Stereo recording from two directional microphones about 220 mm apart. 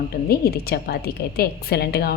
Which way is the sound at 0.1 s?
45° left (ahead or behind).